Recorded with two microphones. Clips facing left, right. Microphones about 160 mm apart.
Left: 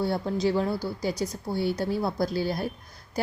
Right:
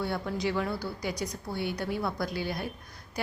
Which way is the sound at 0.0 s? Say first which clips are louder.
Left 5 dB; 35° left (ahead or behind).